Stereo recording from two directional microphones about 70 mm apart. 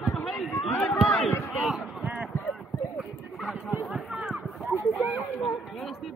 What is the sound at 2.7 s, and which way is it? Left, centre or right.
Clip-clop, left.